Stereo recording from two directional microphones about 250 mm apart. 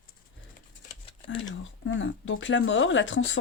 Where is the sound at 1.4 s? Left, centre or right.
Left.